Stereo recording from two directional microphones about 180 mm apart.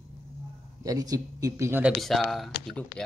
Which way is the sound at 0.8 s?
20° right (ahead or behind).